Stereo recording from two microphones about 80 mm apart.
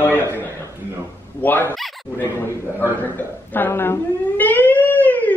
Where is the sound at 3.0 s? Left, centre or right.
Left.